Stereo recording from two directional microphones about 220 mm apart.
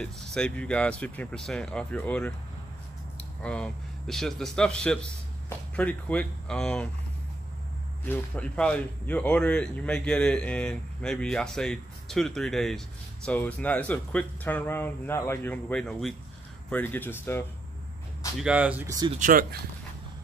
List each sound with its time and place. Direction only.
0.0 s speech: 5° left (ahead or behind)
3.4 s speech: 5° left (ahead or behind)
8.0 s speech: 5° left (ahead or behind)
18.4 s speech: 5° right (ahead or behind)
19.1 s speech: 40° right (ahead or behind)